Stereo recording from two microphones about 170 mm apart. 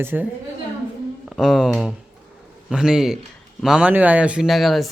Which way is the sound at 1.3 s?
Centre (ahead or behind).